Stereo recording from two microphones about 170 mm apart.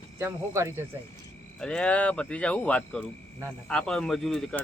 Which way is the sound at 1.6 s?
5° left (ahead or behind).